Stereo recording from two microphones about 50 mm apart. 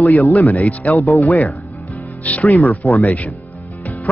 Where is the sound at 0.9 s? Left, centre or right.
Left.